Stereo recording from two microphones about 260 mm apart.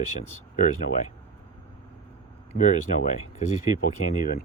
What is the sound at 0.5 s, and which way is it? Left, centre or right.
Speech, left.